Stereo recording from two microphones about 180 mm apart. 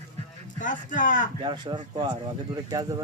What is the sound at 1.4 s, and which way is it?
Speech, 25° right (ahead or behind).